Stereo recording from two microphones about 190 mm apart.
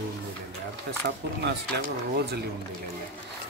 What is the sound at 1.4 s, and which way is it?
Speech, 60° right (ahead or behind).